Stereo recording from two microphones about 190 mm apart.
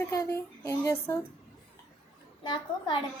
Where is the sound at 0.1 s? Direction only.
15° left (ahead or behind).